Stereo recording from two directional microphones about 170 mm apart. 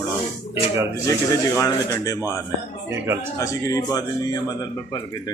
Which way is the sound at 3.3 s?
20° left (ahead or behind).